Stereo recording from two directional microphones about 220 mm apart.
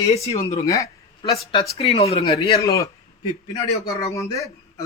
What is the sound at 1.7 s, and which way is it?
Speech, 25° left (ahead or behind).